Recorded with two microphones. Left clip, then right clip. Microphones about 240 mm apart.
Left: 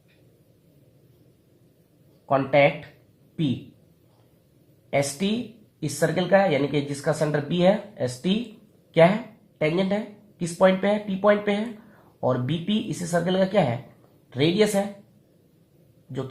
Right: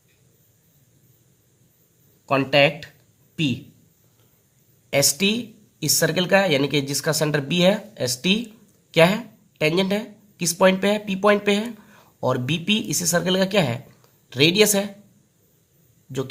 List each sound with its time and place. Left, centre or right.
2.2 s speech: right
4.9 s a woman's voice: right
9.6 s a woman's voice: right